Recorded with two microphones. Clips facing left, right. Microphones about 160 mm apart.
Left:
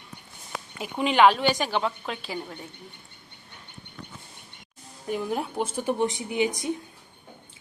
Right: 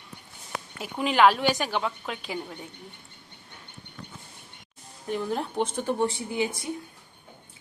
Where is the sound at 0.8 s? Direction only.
Centre (ahead or behind).